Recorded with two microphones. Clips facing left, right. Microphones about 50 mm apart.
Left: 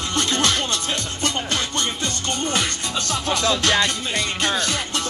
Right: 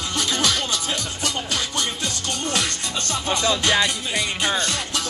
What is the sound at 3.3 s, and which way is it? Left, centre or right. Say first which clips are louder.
Music: even; centre.